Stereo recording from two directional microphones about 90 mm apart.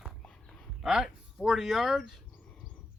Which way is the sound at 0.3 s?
10° left (ahead or behind).